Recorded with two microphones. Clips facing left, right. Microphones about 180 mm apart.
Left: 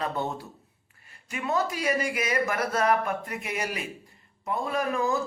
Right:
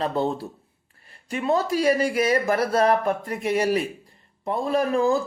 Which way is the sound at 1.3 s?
30° right (ahead or behind).